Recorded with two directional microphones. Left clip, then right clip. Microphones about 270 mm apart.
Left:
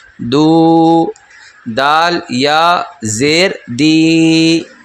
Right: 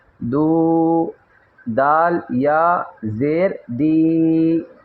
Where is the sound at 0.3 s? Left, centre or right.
Left.